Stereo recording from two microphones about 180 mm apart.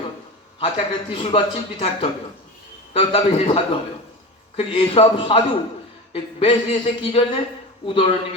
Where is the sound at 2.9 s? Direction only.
35° left (ahead or behind).